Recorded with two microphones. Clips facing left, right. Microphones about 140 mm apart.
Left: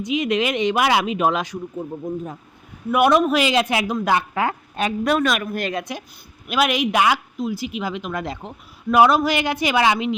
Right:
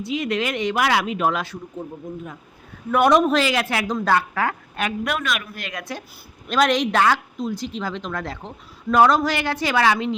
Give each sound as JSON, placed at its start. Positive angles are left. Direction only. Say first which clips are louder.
{"t": 0.0, "sound": "speech", "louder": "left 3 dB", "side_deg": 20}
{"t": 2.9, "sound": "a man's voice", "louder": "even", "side_deg": 5}
{"t": 3.4, "sound": "speech", "louder": "left 3 dB", "side_deg": 20}
{"t": 4.8, "sound": "a woman's voice", "louder": "left 6 dB", "side_deg": 30}
{"t": 5.7, "sound": "speech", "louder": "left 4 dB", "side_deg": 20}
{"t": 6.5, "sound": "speech", "louder": "right 1 dB", "side_deg": 5}